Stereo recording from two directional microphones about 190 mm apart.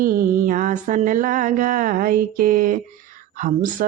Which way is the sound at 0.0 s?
45° right (ahead or behind).